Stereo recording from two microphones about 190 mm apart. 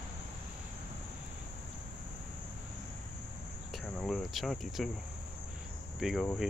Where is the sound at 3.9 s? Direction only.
Centre (ahead or behind).